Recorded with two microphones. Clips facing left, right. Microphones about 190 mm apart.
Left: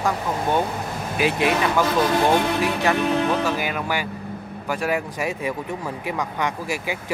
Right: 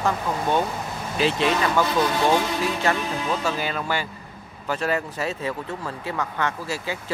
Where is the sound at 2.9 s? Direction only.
65° left (ahead or behind).